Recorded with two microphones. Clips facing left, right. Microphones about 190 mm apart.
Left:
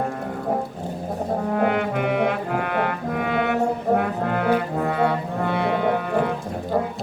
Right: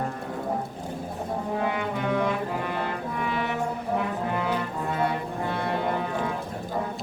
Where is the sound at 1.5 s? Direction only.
60° left (ahead or behind).